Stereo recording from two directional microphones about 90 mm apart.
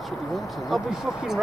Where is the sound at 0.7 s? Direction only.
5° right (ahead or behind).